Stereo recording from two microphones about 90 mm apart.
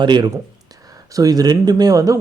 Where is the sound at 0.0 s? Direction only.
55° right (ahead or behind).